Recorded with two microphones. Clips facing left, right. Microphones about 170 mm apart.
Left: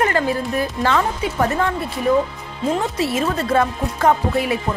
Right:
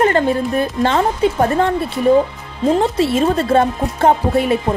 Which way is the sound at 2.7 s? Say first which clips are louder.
Right 6 dB; 30° right (ahead or behind).